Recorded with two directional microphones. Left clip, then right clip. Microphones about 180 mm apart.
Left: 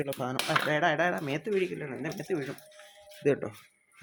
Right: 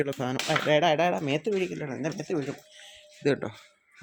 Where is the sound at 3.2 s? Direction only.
25° right (ahead or behind).